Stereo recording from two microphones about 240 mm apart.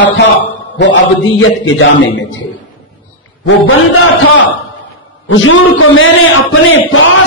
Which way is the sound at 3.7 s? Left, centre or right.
Left.